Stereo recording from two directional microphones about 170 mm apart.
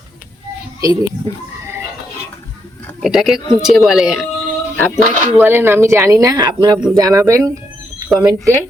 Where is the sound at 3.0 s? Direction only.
Centre (ahead or behind); by 8.6 s 20° right (ahead or behind).